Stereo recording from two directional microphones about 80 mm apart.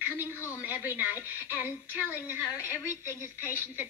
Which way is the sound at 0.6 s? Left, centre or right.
Right.